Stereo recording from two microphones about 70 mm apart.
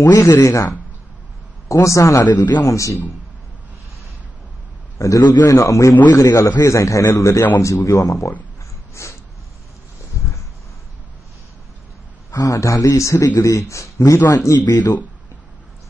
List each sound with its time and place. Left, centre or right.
0.1 s speech: left
0.4 s a man's voice: left
2.6 s a man's voice: left
4.9 s a man's voice: left
9.0 s a sound: left
12.3 s a man's voice: left
14.6 s speech: left